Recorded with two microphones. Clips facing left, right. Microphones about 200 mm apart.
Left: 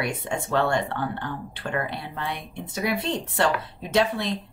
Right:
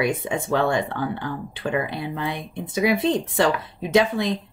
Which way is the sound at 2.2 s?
90° right.